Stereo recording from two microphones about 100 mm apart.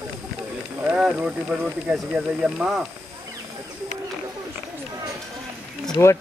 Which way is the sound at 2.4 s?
5° right (ahead or behind).